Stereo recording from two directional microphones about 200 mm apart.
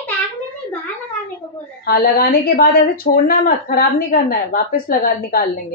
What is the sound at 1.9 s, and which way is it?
Speech, 50° left (ahead or behind).